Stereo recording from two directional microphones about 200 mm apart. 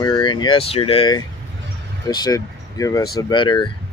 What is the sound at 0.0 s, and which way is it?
Speech, 20° left (ahead or behind).